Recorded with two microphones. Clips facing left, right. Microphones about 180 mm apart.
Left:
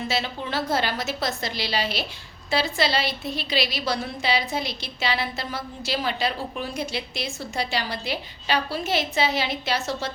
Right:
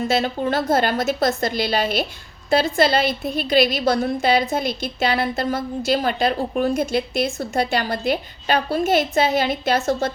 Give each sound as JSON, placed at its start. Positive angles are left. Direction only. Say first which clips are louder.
{"t": 0.1, "sound": "a woman's voice", "louder": "right 8 dB", "side_deg": -50}